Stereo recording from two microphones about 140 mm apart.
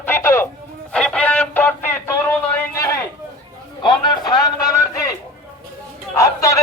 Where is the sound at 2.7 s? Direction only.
20° left (ahead or behind).